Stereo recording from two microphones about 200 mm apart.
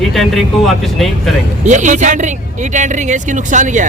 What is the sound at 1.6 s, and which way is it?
Speech, 35° right (ahead or behind).